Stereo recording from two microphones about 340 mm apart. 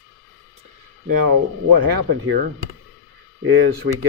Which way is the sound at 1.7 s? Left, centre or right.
Right.